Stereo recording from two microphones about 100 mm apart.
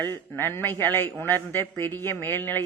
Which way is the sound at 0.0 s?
20° left (ahead or behind).